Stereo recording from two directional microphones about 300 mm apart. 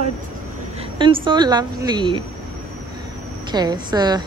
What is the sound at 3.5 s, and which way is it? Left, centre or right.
Speech, centre.